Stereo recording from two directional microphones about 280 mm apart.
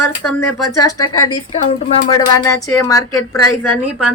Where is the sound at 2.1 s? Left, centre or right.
Centre.